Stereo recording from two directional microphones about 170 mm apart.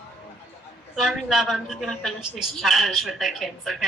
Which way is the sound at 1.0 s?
Centre (ahead or behind).